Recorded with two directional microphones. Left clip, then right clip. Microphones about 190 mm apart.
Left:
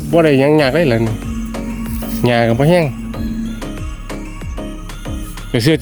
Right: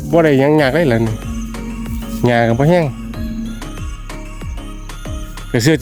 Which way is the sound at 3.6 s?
Centre (ahead or behind).